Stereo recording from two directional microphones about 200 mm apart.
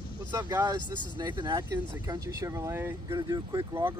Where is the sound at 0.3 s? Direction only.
20° right (ahead or behind).